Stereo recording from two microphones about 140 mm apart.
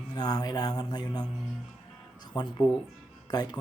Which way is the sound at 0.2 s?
30° left (ahead or behind).